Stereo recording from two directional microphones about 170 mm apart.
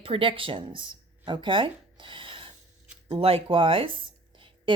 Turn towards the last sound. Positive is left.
turn(degrees=-30)  # may be behind; listen again after turning